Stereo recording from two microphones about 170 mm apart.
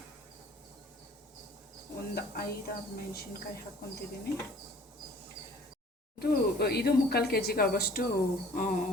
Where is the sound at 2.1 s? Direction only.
65° left (ahead or behind).